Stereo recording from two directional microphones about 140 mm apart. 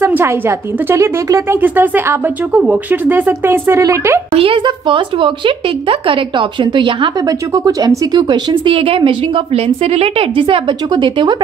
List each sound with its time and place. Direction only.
0.0 s a woman's voice: 20° right (ahead or behind)
4.3 s speech: 40° right (ahead or behind)
7.2 s speech: 25° right (ahead or behind)